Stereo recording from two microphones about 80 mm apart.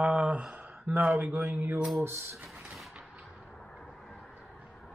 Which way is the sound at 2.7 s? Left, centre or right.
Centre.